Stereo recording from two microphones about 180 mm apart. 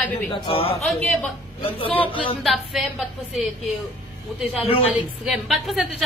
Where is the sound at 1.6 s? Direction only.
30° left (ahead or behind).